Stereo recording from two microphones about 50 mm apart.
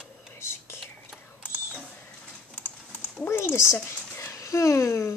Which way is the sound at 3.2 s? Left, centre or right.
Left.